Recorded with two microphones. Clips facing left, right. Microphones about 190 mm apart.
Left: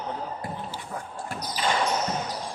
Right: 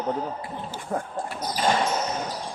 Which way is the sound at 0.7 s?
50° right (ahead or behind).